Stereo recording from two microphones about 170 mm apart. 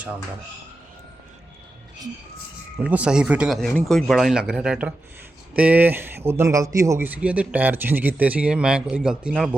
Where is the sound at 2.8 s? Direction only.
5° right (ahead or behind).